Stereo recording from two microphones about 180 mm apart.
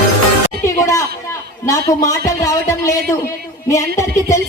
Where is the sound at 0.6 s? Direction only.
15° left (ahead or behind).